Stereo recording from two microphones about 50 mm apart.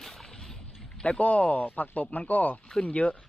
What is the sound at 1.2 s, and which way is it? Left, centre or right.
A man's voice, left.